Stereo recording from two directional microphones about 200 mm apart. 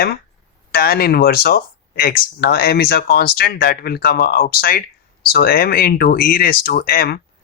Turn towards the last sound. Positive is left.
turn(degrees=50)  # may be behind; listen again after turning